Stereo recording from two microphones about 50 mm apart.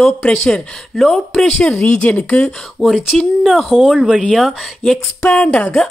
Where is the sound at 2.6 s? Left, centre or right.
Centre.